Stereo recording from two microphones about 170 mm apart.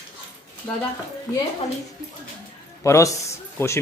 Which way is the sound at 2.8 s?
20° left (ahead or behind).